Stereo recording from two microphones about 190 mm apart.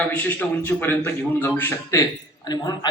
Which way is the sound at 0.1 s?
10° left (ahead or behind).